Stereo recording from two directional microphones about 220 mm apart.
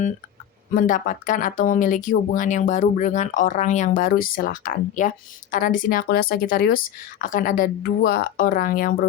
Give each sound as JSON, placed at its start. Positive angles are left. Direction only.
{"t": 0.7, "sound": "speech", "side_deg": 40}